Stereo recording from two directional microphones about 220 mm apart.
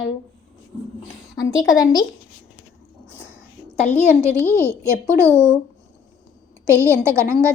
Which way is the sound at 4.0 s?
10° right (ahead or behind).